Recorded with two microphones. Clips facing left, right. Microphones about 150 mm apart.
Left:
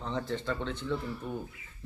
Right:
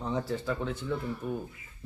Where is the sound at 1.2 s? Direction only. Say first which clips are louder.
Right 6 dB; 25° left (ahead or behind).